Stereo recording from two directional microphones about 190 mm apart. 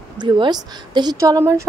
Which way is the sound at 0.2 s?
25° right (ahead or behind).